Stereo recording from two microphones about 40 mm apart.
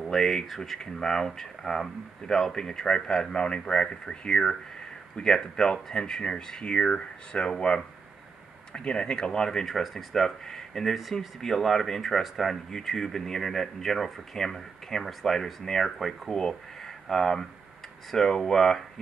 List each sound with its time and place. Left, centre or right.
0.0 s speech: centre
9.7 s speech: centre